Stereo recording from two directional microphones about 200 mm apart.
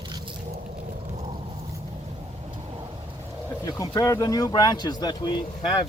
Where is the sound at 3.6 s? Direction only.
20° left (ahead or behind).